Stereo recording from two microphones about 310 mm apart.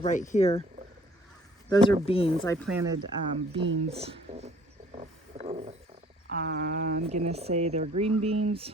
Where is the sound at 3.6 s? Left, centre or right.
Right.